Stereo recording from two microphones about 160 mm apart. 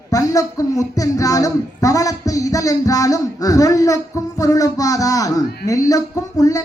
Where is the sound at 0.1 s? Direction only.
20° left (ahead or behind).